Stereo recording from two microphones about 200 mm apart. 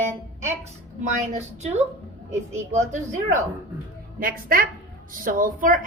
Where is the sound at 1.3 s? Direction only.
35° right (ahead or behind).